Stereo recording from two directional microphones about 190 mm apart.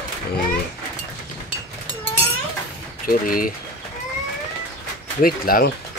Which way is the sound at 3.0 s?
50° left (ahead or behind).